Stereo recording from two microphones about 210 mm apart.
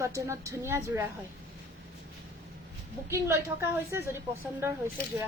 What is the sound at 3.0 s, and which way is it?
Speech, 10° right (ahead or behind).